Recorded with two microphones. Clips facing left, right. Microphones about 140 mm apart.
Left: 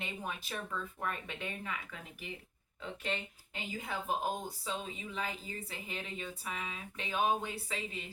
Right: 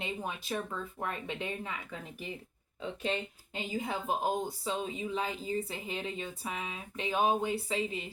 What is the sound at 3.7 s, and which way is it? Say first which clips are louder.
Speech: right 3 dB; 20° right (ahead or behind).